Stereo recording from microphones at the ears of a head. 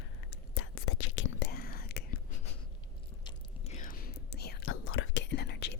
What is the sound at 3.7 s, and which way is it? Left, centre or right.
Whispering, left.